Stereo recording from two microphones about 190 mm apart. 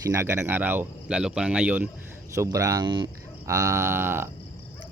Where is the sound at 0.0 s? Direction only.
15° right (ahead or behind).